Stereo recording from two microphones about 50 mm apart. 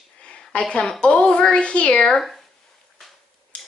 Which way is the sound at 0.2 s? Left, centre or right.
Centre.